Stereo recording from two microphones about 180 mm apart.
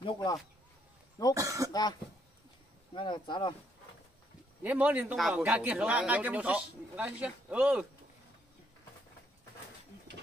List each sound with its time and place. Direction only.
0.0 s speech: 25° left (ahead or behind)
1.3 s speech: 20° right (ahead or behind)
1.7 s speech: 20° left (ahead or behind)
4.6 s speech: 10° right (ahead or behind)